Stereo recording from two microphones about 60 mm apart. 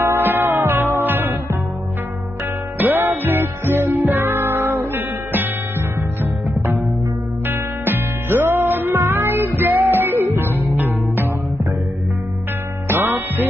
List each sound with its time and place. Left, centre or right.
0.0 s music: right
2.8 s music: right
7.4 s music: right
12.8 s music: right